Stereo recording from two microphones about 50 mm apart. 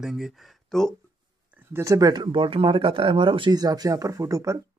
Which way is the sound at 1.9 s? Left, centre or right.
Right.